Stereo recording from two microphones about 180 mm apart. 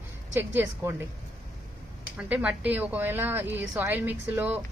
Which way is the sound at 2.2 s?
5° right (ahead or behind).